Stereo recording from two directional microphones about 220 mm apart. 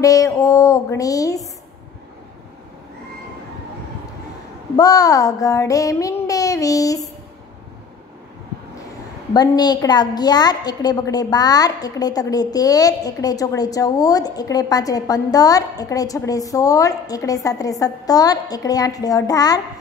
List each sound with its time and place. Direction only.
0.0 s a woman's voice: 15° left (ahead or behind)
4.7 s a woman's voice: 15° left (ahead or behind)
9.3 s a woman's voice: 20° left (ahead or behind)